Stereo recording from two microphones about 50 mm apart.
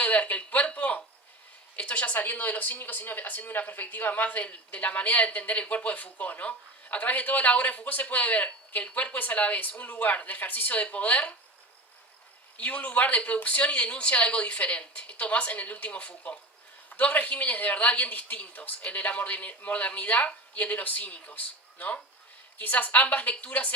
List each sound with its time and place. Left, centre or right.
0.0 s a sound: left
1.7 s speech: left
12.5 s speech: left
20.2 s speech: left
20.7 s speech: left